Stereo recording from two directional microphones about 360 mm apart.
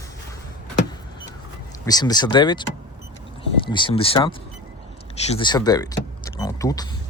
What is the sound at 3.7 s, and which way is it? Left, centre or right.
Speech, centre.